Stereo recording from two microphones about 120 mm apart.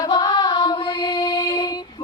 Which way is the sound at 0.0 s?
35° left (ahead or behind).